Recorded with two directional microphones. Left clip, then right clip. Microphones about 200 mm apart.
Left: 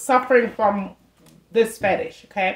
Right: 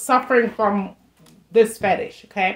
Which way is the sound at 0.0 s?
35° right (ahead or behind).